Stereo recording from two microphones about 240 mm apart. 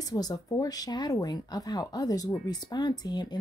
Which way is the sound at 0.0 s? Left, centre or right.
Centre.